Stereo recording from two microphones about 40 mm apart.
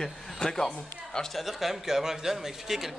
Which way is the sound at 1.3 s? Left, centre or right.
Centre.